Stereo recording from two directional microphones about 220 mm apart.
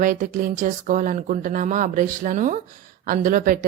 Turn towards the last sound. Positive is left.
turn(degrees=-40)  # may be behind; listen again after turning